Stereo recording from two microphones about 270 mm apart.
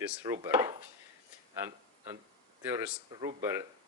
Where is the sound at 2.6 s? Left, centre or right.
Centre.